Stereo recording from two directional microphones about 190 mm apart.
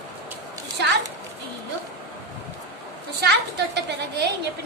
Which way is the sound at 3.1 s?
60° right (ahead or behind).